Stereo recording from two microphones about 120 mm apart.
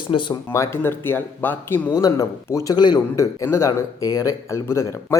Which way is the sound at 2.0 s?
30° left (ahead or behind).